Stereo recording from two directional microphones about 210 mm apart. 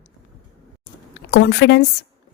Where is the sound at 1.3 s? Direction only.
55° left (ahead or behind).